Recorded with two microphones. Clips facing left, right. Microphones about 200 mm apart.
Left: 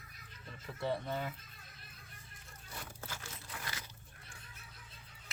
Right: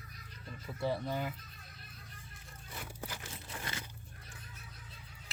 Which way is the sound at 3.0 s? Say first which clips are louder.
Right 3 dB; 15° right (ahead or behind).